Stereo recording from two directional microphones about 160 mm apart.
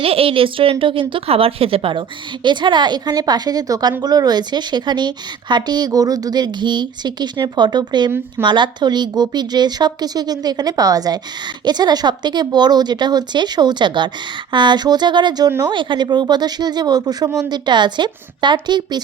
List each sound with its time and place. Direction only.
0.0 s a woman's voice: 35° right (ahead or behind)